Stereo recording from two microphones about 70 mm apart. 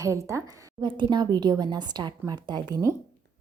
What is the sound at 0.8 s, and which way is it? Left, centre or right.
Speech, right.